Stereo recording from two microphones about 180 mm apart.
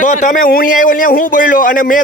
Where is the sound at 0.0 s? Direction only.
45° left (ahead or behind).